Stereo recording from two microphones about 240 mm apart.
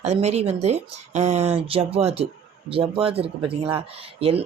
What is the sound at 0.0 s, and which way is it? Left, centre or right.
Speech, right.